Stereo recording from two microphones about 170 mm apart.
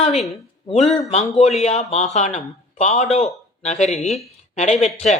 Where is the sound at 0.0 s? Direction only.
40° left (ahead or behind).